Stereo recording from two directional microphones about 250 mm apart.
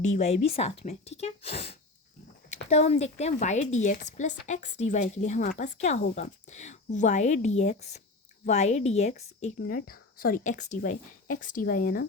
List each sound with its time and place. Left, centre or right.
0.0 s a woman's voice: left